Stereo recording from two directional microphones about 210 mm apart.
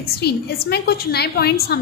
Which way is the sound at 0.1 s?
50° left (ahead or behind).